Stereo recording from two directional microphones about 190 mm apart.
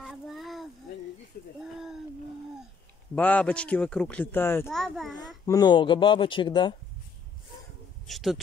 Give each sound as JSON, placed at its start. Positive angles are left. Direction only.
{"t": 0.0, "sound": "a sound", "side_deg": 0}
{"t": 3.2, "sound": "speech", "side_deg": 10}
{"t": 4.6, "sound": "a child's voice", "side_deg": 0}
{"t": 5.1, "sound": "speech", "side_deg": 20}
{"t": 8.1, "sound": "a child's voice", "side_deg": 0}